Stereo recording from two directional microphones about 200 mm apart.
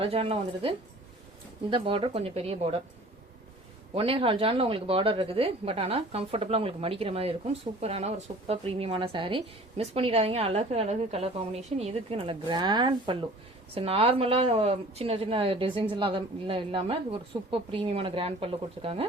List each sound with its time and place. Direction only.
0.0 s a woman's voice: 30° right (ahead or behind)
3.9 s a woman's voice: 30° right (ahead or behind)